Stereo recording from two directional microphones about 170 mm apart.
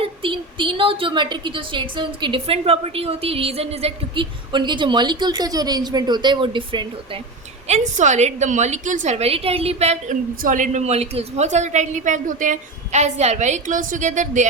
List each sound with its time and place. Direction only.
0.0 s a woman's voice: 30° right (ahead or behind)
7.7 s a woman's voice: 45° right (ahead or behind)